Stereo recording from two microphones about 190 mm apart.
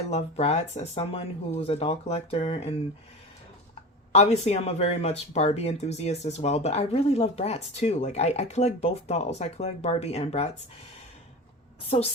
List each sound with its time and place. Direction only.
0.1 s speech: 35° left (ahead or behind)
4.1 s speech: 35° left (ahead or behind)